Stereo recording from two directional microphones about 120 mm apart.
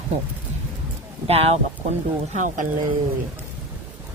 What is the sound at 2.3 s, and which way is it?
Speech, 90° right.